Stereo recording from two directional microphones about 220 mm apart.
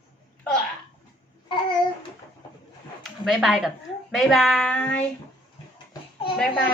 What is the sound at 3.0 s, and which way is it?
Speech, centre (ahead or behind).